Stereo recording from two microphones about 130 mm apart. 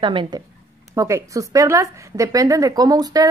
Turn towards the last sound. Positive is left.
turn(degrees=-30)  # may be behind; listen again after turning